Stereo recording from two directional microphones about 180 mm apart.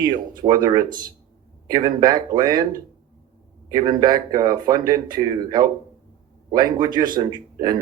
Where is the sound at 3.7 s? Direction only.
20° right (ahead or behind).